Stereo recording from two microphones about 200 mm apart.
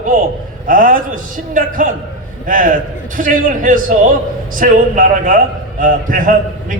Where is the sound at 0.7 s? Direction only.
45° right (ahead or behind).